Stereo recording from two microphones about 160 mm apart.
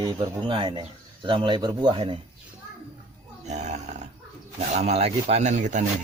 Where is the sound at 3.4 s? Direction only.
45° right (ahead or behind).